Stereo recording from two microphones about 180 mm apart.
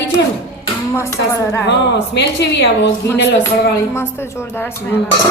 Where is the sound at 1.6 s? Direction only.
75° left (ahead or behind).